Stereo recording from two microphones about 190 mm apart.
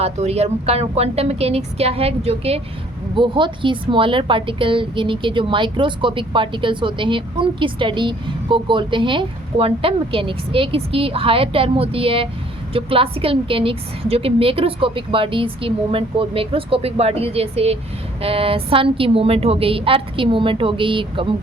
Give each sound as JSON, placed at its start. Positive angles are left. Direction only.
{"t": 0.0, "sound": "a woman's voice", "side_deg": -35}